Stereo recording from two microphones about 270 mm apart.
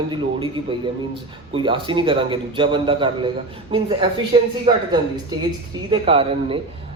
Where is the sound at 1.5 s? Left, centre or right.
Centre.